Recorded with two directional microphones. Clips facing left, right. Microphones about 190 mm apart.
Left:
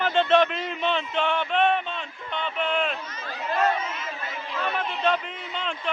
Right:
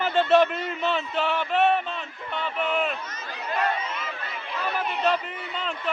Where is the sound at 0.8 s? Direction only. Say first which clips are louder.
Left 1 dB; 5° right (ahead or behind).